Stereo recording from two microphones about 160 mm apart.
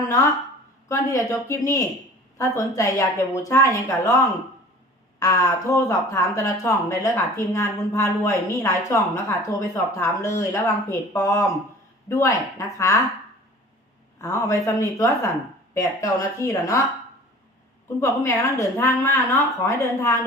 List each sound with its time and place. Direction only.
0.9 s speech: 20° left (ahead or behind)
5.2 s speech: 20° left (ahead or behind)
14.2 s speech: 20° left (ahead or behind)
17.8 s speech: 20° left (ahead or behind)